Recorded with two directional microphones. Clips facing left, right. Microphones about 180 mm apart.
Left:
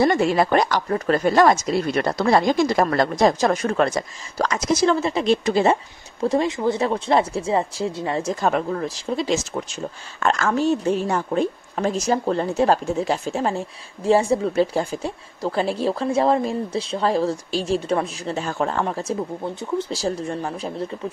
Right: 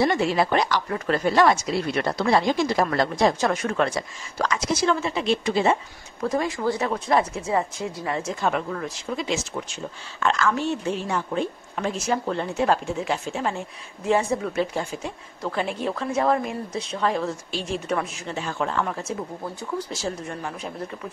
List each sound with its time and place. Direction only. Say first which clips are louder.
0.0 s speech: left 3 dB; 45° left (ahead or behind)
6.2 s a woman's voice: left 4 dB; 25° left (ahead or behind)
10.2 s a woman's voice: left 3 dB; 45° left (ahead or behind)
19.4 s a woman's voice: left 5 dB; 25° left (ahead or behind)